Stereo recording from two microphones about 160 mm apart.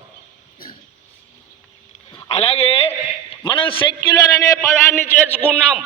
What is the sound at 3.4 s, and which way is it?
Speech, 30° left (ahead or behind).